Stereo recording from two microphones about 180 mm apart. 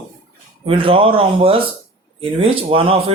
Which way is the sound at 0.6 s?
30° right (ahead or behind).